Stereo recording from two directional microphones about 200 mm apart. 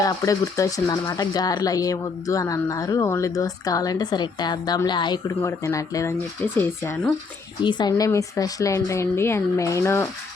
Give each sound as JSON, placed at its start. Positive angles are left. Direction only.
{"t": 0.0, "sound": "speech", "side_deg": 15}
{"t": 7.6, "sound": "speech", "side_deg": 20}